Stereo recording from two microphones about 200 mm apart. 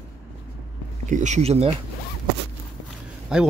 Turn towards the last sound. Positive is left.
turn(degrees=-5)  # may be behind; listen again after turning